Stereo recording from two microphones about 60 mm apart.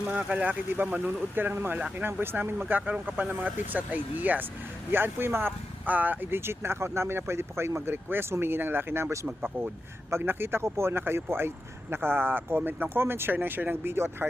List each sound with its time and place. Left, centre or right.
0.3 s speech: right
6.4 s speech: right